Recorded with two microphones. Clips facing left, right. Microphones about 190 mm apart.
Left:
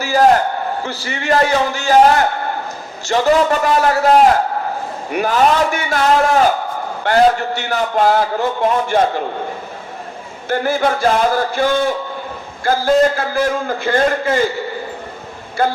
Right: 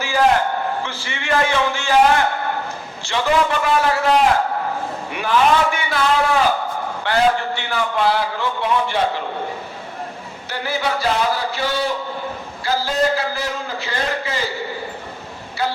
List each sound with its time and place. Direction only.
0.0 s a man's voice: 40° left (ahead or behind)
10.5 s a man's voice: 50° left (ahead or behind)
15.6 s a man's voice: 50° left (ahead or behind)